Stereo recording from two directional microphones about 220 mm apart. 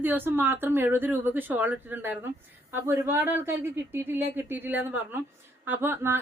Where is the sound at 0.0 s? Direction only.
10° right (ahead or behind).